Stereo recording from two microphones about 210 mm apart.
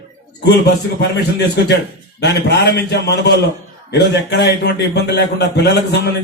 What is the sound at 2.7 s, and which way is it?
A man's voice, 50° left (ahead or behind).